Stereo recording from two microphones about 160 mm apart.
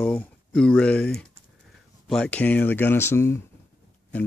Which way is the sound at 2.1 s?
5° left (ahead or behind).